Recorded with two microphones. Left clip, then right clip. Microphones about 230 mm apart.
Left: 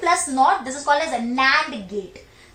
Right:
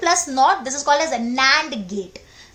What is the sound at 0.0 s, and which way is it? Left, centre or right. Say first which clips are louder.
A woman's voice: right 1 dB; right.